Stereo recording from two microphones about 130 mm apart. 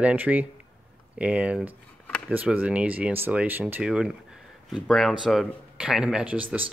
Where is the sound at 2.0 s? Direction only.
10° left (ahead or behind).